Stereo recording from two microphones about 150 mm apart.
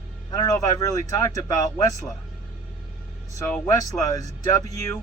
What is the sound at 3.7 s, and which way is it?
Speech, 20° left (ahead or behind).